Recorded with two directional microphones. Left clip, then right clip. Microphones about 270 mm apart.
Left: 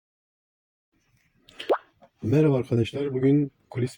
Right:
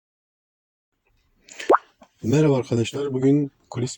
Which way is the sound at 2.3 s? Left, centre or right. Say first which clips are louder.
Right 2 dB; centre.